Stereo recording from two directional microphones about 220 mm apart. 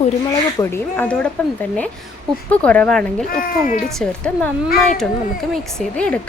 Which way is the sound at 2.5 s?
5° left (ahead or behind).